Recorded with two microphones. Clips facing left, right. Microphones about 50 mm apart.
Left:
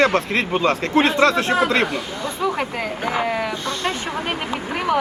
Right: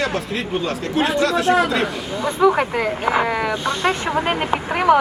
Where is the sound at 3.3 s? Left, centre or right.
Centre.